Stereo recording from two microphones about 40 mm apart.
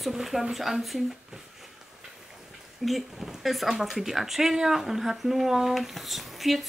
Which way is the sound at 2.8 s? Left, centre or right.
Centre.